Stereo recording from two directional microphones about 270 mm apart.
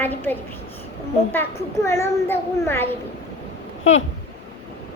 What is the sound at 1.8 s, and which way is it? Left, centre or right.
A woman's voice, centre.